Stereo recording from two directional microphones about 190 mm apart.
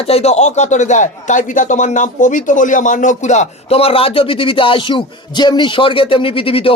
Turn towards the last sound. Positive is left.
turn(degrees=30)  # may be behind; listen again after turning